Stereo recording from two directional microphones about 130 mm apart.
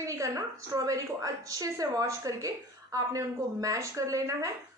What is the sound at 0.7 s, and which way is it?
A woman's voice, 25° right (ahead or behind).